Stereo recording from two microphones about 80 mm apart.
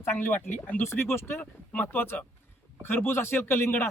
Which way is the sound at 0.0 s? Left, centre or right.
Left.